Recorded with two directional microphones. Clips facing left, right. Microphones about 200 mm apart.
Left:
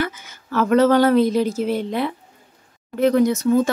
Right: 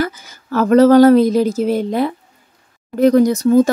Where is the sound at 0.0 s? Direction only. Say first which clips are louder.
Right 4 dB; 40° right (ahead or behind).